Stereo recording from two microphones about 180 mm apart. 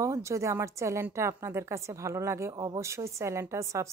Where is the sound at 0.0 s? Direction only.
15° right (ahead or behind).